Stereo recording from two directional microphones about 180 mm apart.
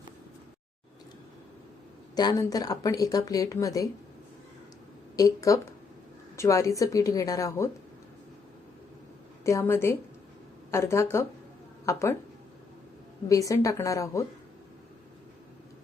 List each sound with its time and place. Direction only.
2.1 s speech: 20° left (ahead or behind)
5.1 s a woman's voice: 20° left (ahead or behind)
9.4 s a woman's voice: 15° left (ahead or behind)
13.2 s a woman's voice: 20° left (ahead or behind)